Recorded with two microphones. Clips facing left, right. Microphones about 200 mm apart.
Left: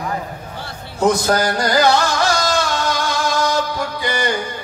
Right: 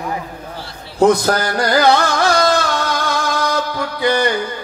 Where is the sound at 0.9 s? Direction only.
60° right (ahead or behind).